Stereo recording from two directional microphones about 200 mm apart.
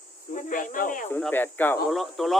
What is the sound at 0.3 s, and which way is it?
Speech, 40° left (ahead or behind).